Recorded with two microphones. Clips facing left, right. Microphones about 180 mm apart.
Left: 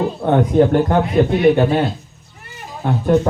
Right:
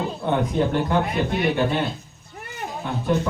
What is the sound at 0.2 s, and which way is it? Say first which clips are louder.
A man's voice: left 9 dB; 50° left (ahead or behind).